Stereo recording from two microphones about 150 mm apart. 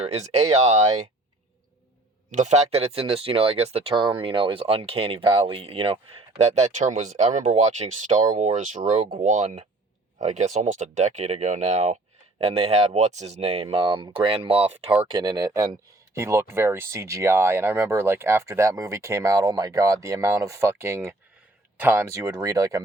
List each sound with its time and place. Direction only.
0.0 s speech: 45° right (ahead or behind)
2.3 s speech: 50° right (ahead or behind); by 22.8 s 20° right (ahead or behind)